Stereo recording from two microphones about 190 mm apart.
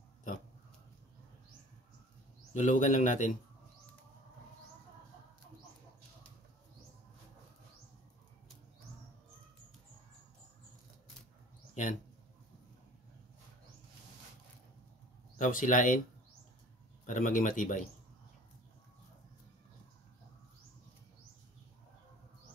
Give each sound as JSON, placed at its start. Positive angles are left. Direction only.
{"t": 2.5, "sound": "speech", "side_deg": 40}
{"t": 11.7, "sound": "mouse", "side_deg": 40}
{"t": 15.3, "sound": "a man's voice", "side_deg": 40}
{"t": 17.0, "sound": "a man's voice", "side_deg": 40}